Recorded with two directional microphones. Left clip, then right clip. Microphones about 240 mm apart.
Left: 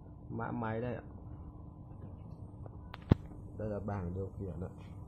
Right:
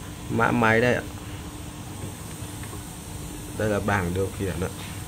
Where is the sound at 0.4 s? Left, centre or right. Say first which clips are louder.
Right 19 dB; right.